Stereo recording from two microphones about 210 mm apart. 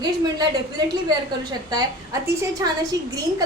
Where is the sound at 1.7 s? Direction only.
20° right (ahead or behind).